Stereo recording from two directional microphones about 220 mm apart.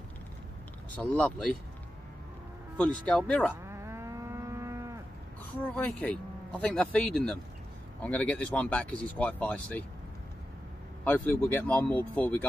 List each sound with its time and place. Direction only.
0.9 s speech: 5° left (ahead or behind)
2.8 s speech: 5° left (ahead or behind)
3.6 s livestock: 10° right (ahead or behind)
5.8 s speech: 5° left (ahead or behind)
11.1 s speech: 10° left (ahead or behind)